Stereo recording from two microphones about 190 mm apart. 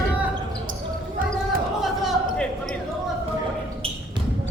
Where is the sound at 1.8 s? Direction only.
Centre (ahead or behind).